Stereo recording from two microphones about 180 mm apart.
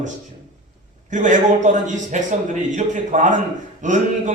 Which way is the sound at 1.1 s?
45° right (ahead or behind).